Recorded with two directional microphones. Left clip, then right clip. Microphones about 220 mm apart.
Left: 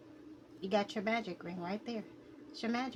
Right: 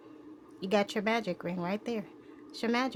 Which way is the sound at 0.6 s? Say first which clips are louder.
Right 5 dB; 55° right (ahead or behind).